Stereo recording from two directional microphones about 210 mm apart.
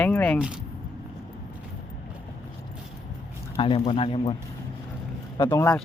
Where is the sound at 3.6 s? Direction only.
25° left (ahead or behind).